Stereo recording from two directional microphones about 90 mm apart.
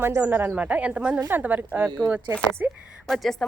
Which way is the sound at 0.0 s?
20° right (ahead or behind).